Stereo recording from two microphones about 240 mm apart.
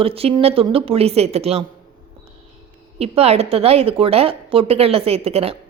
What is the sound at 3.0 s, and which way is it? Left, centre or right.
Speech, right.